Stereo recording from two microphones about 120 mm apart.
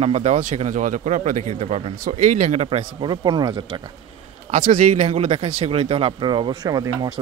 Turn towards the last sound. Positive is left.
turn(degrees=-30)  # may be behind; listen again after turning